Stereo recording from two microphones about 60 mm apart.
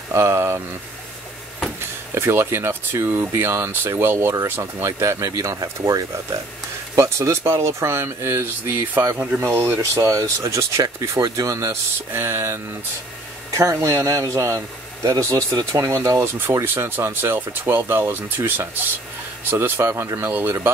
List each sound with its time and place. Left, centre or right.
0.1 s speech: right
1.8 s speech: right
7.0 s speech: right
9.1 s speech: right
9.4 s speech: right
10.8 s speech: right
12.1 s speech: right
13.6 s speech: right
16.6 s speech: right
19.8 s speech: right